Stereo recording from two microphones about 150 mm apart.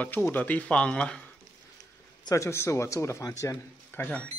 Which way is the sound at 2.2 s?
20° left (ahead or behind).